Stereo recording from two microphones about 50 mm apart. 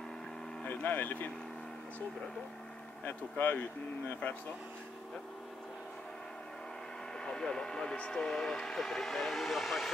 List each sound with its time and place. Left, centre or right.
0.7 s speech: left
3.1 s speech: left
7.2 s speech: centre